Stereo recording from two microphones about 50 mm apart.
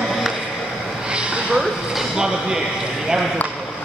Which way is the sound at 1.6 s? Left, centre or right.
Centre.